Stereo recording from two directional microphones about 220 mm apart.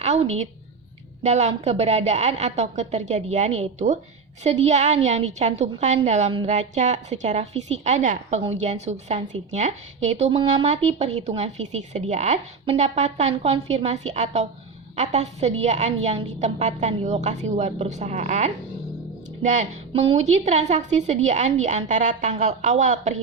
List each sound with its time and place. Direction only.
0.0 s a woman's voice: 30° right (ahead or behind)